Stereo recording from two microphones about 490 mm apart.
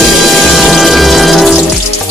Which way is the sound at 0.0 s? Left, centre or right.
Centre.